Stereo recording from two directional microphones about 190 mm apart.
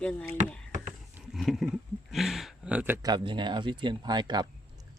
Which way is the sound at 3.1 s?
25° right (ahead or behind).